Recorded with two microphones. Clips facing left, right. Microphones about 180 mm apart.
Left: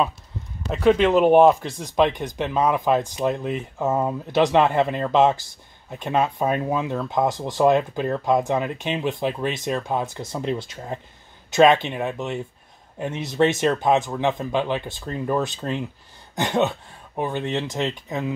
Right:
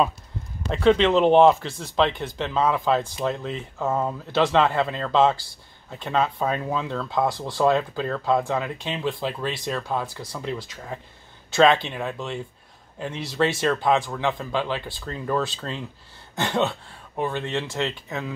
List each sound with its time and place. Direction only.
0.7 s speech: 10° left (ahead or behind)